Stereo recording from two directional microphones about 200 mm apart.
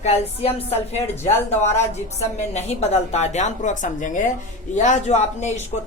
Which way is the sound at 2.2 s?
35° left (ahead or behind).